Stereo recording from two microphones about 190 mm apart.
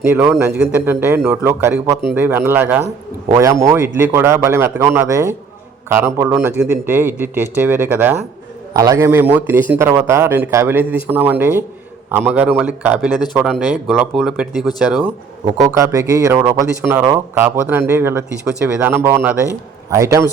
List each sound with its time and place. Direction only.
0.0 s a man's voice: 10° right (ahead or behind)
15.5 s a man's voice: 20° right (ahead or behind)